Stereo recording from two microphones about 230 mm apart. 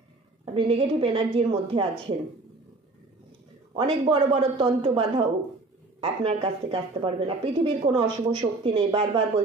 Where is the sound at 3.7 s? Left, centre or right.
Right.